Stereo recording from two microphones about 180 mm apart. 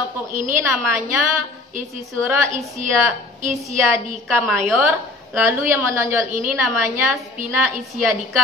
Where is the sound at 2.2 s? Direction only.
15° right (ahead or behind).